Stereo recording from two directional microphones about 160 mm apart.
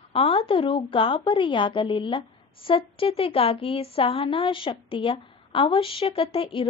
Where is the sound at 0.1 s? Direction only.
35° left (ahead or behind).